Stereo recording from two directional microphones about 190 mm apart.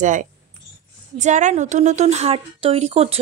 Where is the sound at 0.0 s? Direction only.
40° right (ahead or behind).